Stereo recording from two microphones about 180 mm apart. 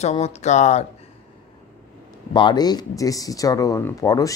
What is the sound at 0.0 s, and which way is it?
Speech, 35° left (ahead or behind).